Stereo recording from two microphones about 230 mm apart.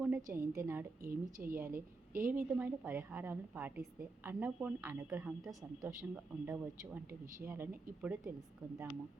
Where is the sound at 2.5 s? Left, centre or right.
Centre.